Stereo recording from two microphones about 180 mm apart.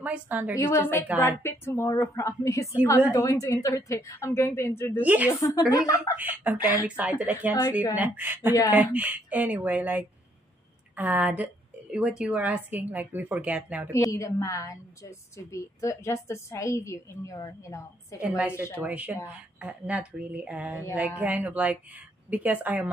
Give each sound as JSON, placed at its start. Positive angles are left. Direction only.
{"t": 0.0, "sound": "a woman's voice", "side_deg": -10}
{"t": 0.7, "sound": "a woman's voice", "side_deg": 15}
{"t": 5.0, "sound": "a woman's voice", "side_deg": -10}
{"t": 5.3, "sound": "speech", "side_deg": 20}
{"t": 6.1, "sound": "a woman's voice", "side_deg": -10}
{"t": 13.9, "sound": "a woman's voice", "side_deg": 15}
{"t": 18.2, "sound": "a woman's voice", "side_deg": -5}
{"t": 18.5, "sound": "a woman's voice", "side_deg": 15}
{"t": 18.8, "sound": "a woman's voice", "side_deg": -10}